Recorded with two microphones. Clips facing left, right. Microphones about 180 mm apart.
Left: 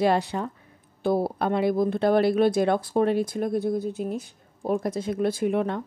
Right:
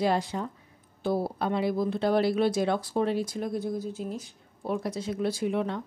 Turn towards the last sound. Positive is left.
turn(degrees=55)  # may be behind; listen again after turning